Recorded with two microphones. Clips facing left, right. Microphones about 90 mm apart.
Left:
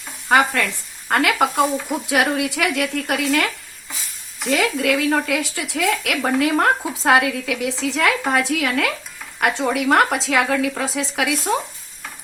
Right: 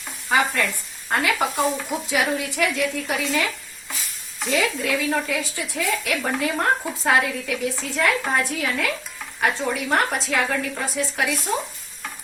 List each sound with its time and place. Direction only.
0.3 s speech: 65° left (ahead or behind)
4.5 s a woman's voice: 70° left (ahead or behind); by 8.9 s 90° left
9.4 s a woman's voice: 75° left (ahead or behind)